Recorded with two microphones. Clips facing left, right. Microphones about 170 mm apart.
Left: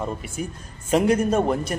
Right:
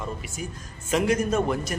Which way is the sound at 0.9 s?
35° left (ahead or behind).